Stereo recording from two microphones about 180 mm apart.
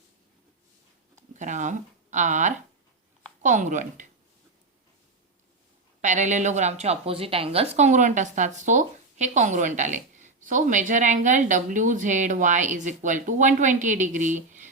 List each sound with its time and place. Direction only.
1.4 s speech: 45° right (ahead or behind)
6.0 s speech: 40° right (ahead or behind)